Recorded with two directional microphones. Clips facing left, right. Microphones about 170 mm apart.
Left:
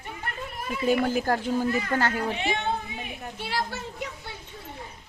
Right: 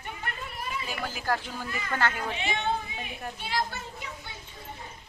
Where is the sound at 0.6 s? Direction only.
50° left (ahead or behind).